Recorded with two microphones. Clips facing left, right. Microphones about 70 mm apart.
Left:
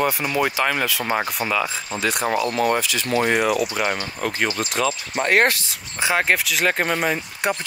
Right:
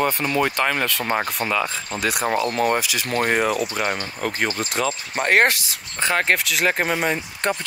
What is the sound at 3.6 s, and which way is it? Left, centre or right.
Speech, centre.